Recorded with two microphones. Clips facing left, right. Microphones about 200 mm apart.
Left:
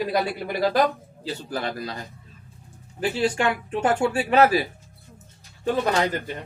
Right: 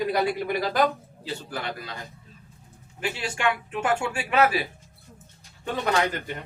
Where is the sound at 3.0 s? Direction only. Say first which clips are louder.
Left 5 dB; 35° left (ahead or behind).